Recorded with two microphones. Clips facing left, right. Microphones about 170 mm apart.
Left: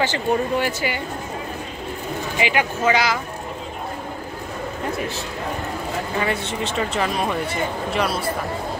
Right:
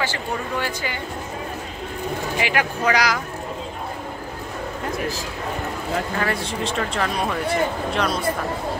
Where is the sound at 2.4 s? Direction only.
Centre (ahead or behind).